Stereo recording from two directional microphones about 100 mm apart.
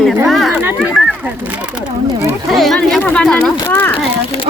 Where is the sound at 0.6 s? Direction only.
20° right (ahead or behind).